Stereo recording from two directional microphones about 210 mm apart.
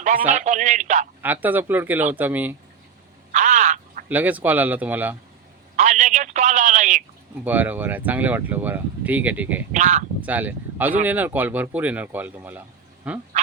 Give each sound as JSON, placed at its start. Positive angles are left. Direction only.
{"t": 0.3, "sound": "a man's voice", "side_deg": -35}
{"t": 1.2, "sound": "speech", "side_deg": -10}
{"t": 3.3, "sound": "frog", "side_deg": -35}
{"t": 4.1, "sound": "speech", "side_deg": -10}
{"t": 5.7, "sound": "a sound", "side_deg": -35}
{"t": 7.4, "sound": "speech", "side_deg": -10}
{"t": 9.7, "sound": "a man's voice", "side_deg": -35}
{"t": 10.2, "sound": "speech", "side_deg": -10}